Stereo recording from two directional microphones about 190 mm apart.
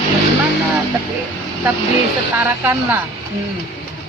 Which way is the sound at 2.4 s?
10° right (ahead or behind).